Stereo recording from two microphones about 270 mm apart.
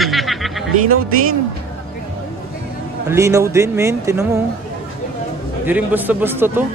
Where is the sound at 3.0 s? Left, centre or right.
Centre.